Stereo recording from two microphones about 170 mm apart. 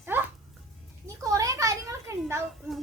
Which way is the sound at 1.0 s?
20° right (ahead or behind).